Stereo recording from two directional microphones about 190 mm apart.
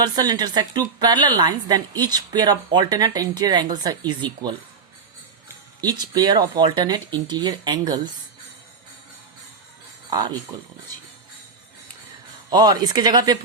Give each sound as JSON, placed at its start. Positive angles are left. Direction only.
{"t": 0.0, "sound": "a woman's voice", "side_deg": -20}
{"t": 5.8, "sound": "a woman's voice", "side_deg": -20}
{"t": 10.1, "sound": "speech", "side_deg": -25}
{"t": 12.5, "sound": "a woman's voice", "side_deg": -20}